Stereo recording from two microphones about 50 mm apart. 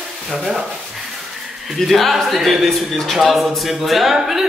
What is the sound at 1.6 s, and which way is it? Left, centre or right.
Speech, centre.